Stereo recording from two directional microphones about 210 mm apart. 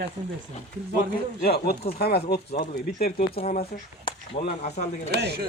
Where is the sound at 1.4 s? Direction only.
45° left (ahead or behind).